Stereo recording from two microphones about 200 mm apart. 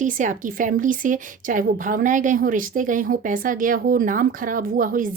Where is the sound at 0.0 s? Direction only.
40° right (ahead or behind).